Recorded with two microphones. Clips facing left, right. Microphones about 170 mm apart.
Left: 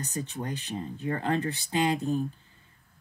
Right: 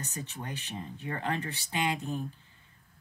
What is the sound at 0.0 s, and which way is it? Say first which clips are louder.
Speech: left 6 dB; 35° left (ahead or behind).